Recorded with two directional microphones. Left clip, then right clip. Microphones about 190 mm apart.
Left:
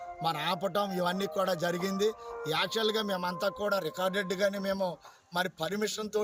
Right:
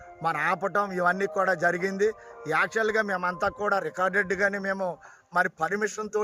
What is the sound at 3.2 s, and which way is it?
Speech, 40° right (ahead or behind).